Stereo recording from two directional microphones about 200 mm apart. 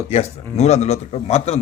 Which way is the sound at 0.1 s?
30° left (ahead or behind).